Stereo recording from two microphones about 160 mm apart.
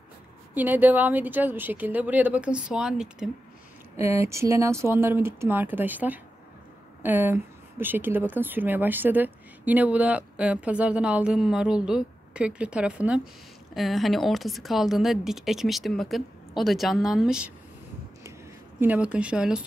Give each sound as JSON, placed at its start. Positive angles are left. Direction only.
{"t": 0.6, "sound": "speech", "side_deg": -10}
{"t": 3.9, "sound": "a woman's voice", "side_deg": -15}
{"t": 18.8, "sound": "speech", "side_deg": -10}